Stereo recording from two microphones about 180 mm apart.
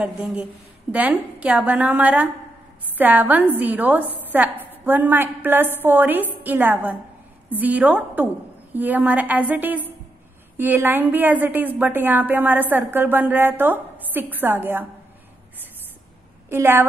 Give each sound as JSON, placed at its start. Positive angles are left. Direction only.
{"t": 0.0, "sound": "a woman's voice", "side_deg": -5}
{"t": 16.4, "sound": "a woman's voice", "side_deg": -15}